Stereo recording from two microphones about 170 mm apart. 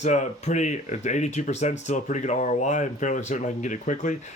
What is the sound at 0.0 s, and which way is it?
Speech, 45° left (ahead or behind).